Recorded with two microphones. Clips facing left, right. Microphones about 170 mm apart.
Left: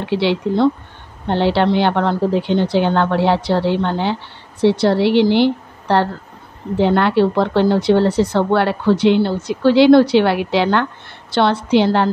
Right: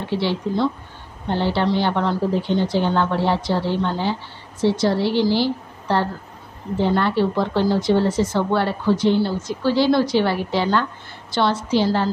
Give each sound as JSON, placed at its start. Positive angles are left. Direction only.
{"t": 0.1, "sound": "a woman's voice", "side_deg": 70}